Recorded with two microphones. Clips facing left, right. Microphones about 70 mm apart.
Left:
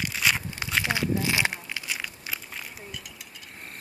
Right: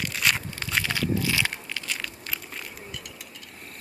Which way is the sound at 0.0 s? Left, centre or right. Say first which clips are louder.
Even; centre.